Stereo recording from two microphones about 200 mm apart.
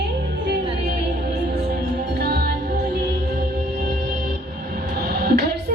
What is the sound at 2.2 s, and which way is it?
Music, 55° right (ahead or behind).